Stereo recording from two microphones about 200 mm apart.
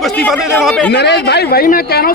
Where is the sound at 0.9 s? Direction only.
55° left (ahead or behind).